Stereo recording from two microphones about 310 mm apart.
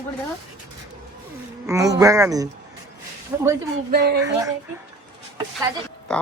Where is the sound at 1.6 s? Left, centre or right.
Centre.